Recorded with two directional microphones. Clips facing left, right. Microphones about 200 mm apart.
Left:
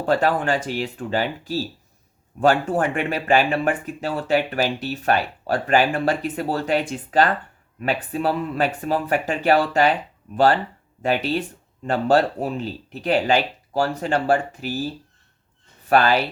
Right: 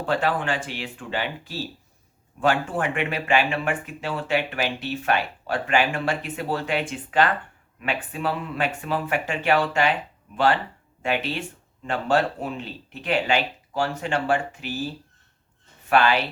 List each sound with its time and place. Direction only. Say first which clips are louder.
0.0 s speech: left 4 dB; 40° left (ahead or behind)
15.9 s speech: left 2 dB; 40° left (ahead or behind)